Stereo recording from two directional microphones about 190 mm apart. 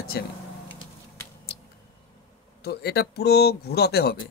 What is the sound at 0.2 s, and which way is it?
Speech, 60° left (ahead or behind).